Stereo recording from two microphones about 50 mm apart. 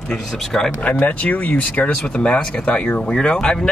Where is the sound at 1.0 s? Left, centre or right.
Left.